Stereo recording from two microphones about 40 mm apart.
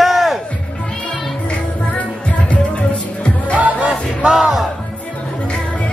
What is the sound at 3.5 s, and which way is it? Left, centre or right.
Music, right.